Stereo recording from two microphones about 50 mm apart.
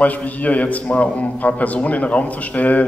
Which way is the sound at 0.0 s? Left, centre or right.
Left.